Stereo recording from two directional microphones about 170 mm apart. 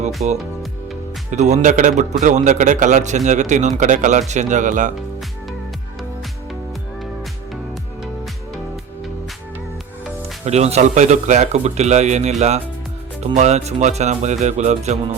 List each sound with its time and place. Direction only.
0.2 s a man's voice: 45° right (ahead or behind)
10.4 s speech: 40° right (ahead or behind)